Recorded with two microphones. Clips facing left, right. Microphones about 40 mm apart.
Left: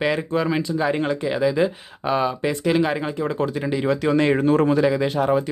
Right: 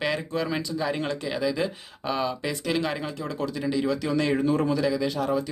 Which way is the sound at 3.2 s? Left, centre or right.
Left.